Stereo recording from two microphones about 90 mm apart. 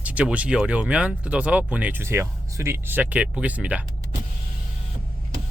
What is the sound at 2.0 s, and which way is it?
Speech, 30° right (ahead or behind).